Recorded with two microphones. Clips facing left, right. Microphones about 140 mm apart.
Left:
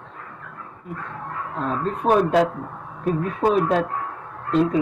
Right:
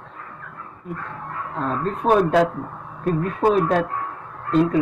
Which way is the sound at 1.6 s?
Centre (ahead or behind).